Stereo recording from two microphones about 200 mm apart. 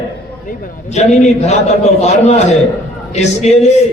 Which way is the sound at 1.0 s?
35° left (ahead or behind).